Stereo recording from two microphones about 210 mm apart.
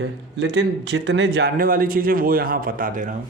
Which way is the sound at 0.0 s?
60° right (ahead or behind).